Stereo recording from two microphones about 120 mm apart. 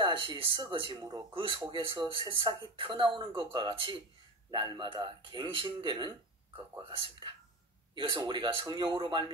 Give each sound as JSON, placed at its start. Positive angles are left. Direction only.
{"t": 0.0, "sound": "speech", "side_deg": -40}
{"t": 7.9, "sound": "speech", "side_deg": -40}